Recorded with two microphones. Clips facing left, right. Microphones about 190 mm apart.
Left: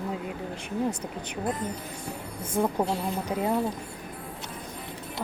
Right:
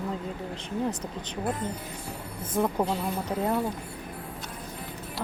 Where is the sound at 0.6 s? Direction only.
10° left (ahead or behind).